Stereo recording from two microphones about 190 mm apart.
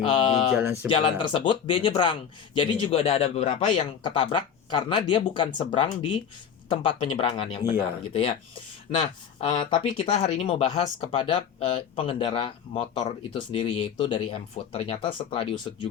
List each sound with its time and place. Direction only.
0.0 s speech: 25° left (ahead or behind)